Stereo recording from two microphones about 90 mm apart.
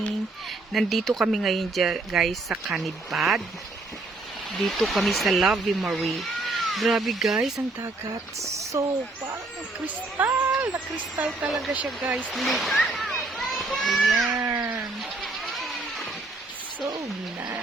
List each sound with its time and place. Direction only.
0.7 s speech: centre (ahead or behind)
4.5 s speech: centre (ahead or behind)
8.4 s speech: 35° right (ahead or behind)
9.8 s speech: 20° right (ahead or behind)
11.4 s speech: centre (ahead or behind)
14.4 s cat: 25° right (ahead or behind)
15.2 s a sound: centre (ahead or behind)
16.8 s speech: 50° right (ahead or behind)